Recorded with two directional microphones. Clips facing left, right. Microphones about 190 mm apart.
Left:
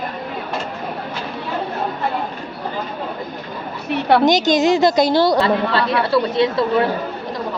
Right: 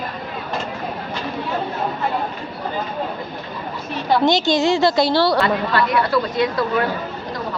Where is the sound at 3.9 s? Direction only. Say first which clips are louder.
Left 4 dB; 65° left (ahead or behind).